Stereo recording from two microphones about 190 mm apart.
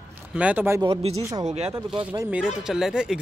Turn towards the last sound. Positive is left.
turn(degrees=-5)  # may be behind; listen again after turning